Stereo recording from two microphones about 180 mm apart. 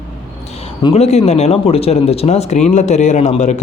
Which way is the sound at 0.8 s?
35° left (ahead or behind).